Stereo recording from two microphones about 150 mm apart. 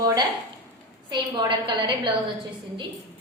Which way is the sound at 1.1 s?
30° right (ahead or behind).